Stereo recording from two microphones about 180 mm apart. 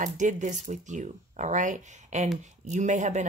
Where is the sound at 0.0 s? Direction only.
45° right (ahead or behind).